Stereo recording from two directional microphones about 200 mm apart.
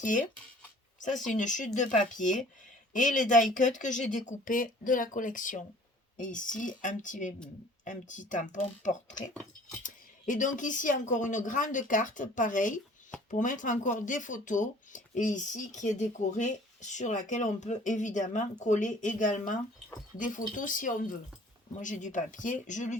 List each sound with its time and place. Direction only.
0.0 s speech: 40° left (ahead or behind)
1.4 s speech: 40° left (ahead or behind)
2.9 s speech: 40° left (ahead or behind)